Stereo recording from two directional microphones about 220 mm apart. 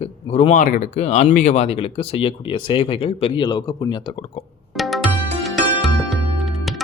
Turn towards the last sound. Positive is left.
turn(degrees=0)  # may be behind; listen again after turning